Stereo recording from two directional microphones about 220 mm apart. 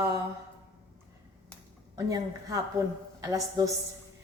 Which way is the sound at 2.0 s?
15° right (ahead or behind).